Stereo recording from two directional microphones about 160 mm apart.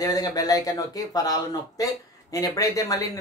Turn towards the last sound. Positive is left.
turn(degrees=20)  # may be behind; listen again after turning